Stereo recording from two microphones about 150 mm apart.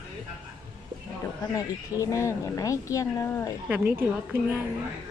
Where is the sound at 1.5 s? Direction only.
20° left (ahead or behind).